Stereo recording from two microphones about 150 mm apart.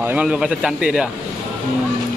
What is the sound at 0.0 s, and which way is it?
Speech, 10° right (ahead or behind).